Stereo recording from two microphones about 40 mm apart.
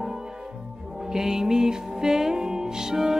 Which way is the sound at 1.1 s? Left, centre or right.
Centre.